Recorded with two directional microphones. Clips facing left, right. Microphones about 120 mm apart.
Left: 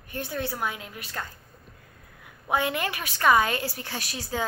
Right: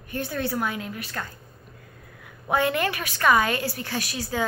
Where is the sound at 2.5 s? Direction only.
15° left (ahead or behind).